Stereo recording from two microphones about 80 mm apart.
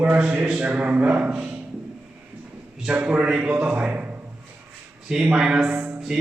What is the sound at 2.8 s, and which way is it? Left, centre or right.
A man's voice, centre.